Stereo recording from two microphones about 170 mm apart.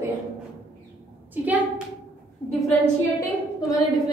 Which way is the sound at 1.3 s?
10° right (ahead or behind).